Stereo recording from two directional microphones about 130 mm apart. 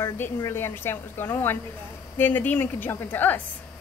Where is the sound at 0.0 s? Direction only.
20° left (ahead or behind).